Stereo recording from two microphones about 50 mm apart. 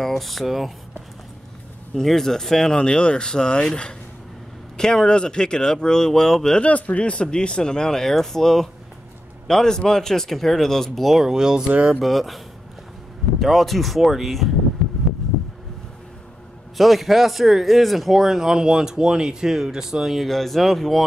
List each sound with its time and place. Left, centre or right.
0.0 s speech: centre
2.0 s speech: centre
6.6 s speech: left; by 11.7 s centre
11.7 s speech: right
12.0 s speech: centre
13.4 s speech: centre
16.7 s speech: centre
20.2 s speech: centre